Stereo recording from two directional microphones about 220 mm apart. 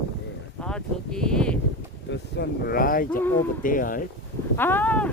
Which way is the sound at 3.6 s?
40° left (ahead or behind).